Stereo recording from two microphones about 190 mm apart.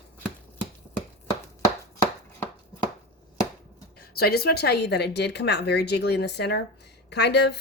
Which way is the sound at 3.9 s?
55° left (ahead or behind).